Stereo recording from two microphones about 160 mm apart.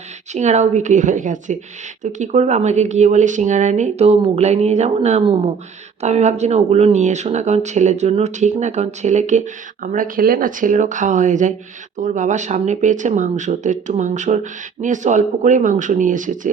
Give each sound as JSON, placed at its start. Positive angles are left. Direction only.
{"t": 0.3, "sound": "speech", "side_deg": -45}